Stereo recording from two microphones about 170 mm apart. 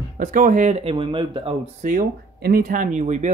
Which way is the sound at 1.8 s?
55° right (ahead or behind).